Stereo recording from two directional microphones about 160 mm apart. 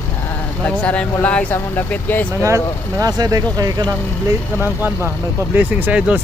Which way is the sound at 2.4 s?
20° right (ahead or behind).